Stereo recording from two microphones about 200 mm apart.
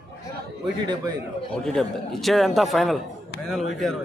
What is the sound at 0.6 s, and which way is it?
Speech, 20° right (ahead or behind).